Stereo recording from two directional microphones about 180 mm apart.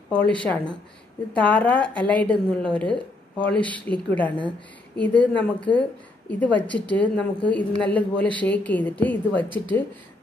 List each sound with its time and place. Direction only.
0.1 s a woman's voice: 5° left (ahead or behind)